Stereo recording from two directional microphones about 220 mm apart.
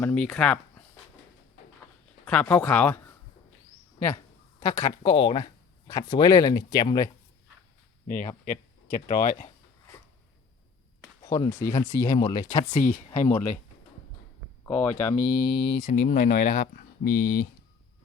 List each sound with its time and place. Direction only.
0.0 s speech: 5° left (ahead or behind)
2.2 s speech: 5° left (ahead or behind)
4.6 s speech: 15° left (ahead or behind)
8.4 s speech: 40° left (ahead or behind)
11.2 s speech: 15° left (ahead or behind)
14.6 s speech: 5° left (ahead or behind)
15.1 s speech: 40° left (ahead or behind)
15.8 s speech: 35° left (ahead or behind)